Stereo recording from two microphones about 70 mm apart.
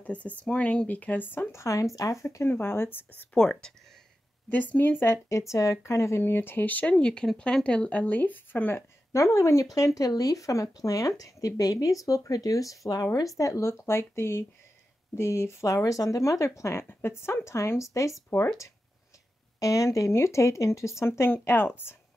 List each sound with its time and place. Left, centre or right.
0.0 s speech: left
1.5 s speech: left
2.5 s speech: left
3.3 s speech: centre
4.5 s speech: left
5.0 s speech: left
9.1 s speech: left
19.6 s speech: left